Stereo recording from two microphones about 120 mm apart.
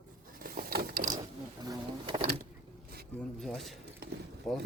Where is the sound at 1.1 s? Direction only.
30° right (ahead or behind).